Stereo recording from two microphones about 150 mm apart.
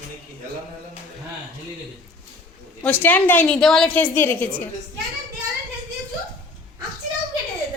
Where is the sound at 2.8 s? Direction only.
10° left (ahead or behind).